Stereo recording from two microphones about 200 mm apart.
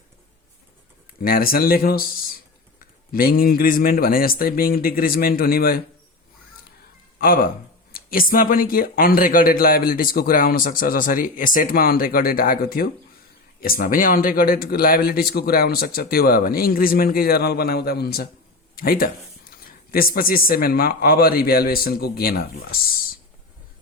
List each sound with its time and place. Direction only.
1.2 s speech: 45° left (ahead or behind)
7.2 s speech: 45° left (ahead or behind)